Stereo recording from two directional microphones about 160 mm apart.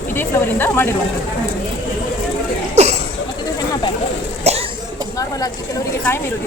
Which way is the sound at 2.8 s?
45° right (ahead or behind).